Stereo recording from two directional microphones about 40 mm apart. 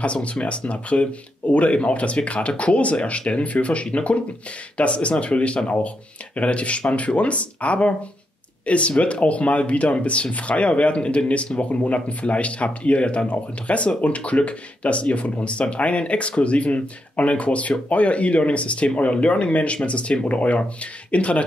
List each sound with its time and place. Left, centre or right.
0.0 s speech: left